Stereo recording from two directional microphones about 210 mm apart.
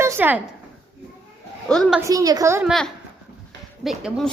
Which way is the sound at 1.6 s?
Centre (ahead or behind).